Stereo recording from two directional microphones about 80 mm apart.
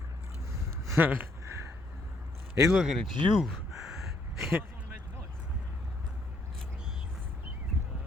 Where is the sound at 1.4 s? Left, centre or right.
Right.